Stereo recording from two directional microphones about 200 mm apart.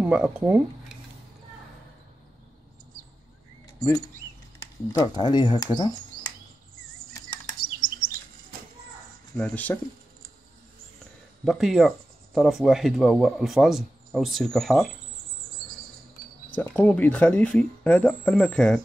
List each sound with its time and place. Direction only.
0.0 s speech: 5° right (ahead or behind)
4.6 s speech: 20° left (ahead or behind)
9.3 s speech: 5° left (ahead or behind)
11.4 s speech: centre (ahead or behind)
16.5 s speech: 5° left (ahead or behind)